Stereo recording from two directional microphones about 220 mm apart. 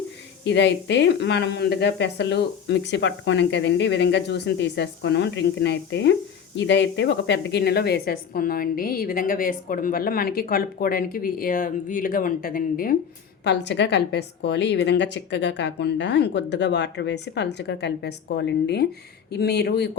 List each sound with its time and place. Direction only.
0.4 s a woman's voice: 50° left (ahead or behind)
13.4 s speech: 50° left (ahead or behind)